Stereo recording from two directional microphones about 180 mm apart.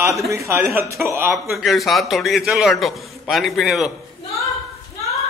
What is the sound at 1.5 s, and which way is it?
A man's voice, centre (ahead or behind).